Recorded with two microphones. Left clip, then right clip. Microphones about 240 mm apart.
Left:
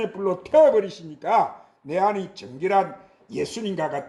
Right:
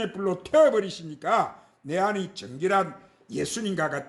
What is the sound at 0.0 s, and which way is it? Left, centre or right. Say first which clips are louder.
A man's voice: left 3 dB; right.